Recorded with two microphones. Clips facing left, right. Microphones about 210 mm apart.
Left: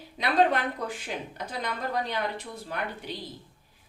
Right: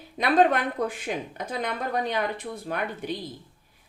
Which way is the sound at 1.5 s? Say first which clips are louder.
Right 3 dB; 55° right (ahead or behind).